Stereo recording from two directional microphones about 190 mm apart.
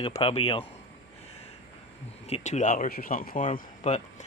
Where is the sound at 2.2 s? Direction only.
35° left (ahead or behind).